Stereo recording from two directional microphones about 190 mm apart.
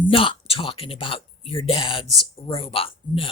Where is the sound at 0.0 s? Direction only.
25° left (ahead or behind).